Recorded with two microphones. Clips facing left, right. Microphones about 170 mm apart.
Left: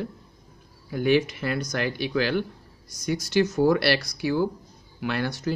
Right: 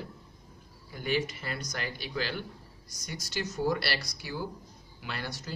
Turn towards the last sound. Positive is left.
turn(degrees=65)  # may be behind; listen again after turning